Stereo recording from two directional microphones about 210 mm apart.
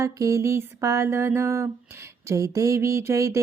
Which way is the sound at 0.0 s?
15° right (ahead or behind).